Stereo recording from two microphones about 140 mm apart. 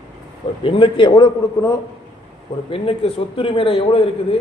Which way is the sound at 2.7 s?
40° left (ahead or behind).